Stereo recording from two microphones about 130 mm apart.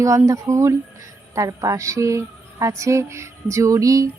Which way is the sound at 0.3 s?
25° right (ahead or behind).